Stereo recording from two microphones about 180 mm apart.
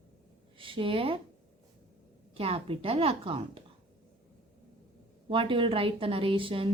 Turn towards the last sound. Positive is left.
turn(degrees=-30)  # may be behind; listen again after turning